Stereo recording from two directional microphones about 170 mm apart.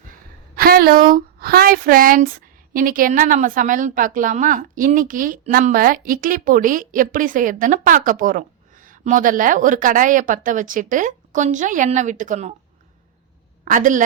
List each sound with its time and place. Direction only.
0.5 s speech: 60° right (ahead or behind); by 12.5 s 45° right (ahead or behind)
13.7 s speech: 50° right (ahead or behind)